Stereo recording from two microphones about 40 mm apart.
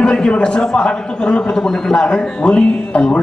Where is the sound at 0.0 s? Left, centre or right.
Left.